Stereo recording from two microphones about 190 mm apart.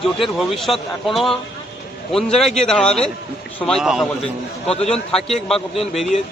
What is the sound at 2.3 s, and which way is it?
A man's voice, 5° left (ahead or behind).